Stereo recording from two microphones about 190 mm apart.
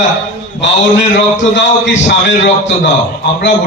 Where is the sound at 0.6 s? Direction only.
75° left (ahead or behind).